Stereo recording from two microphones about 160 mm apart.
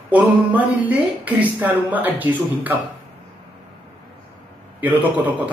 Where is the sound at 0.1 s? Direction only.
10° right (ahead or behind).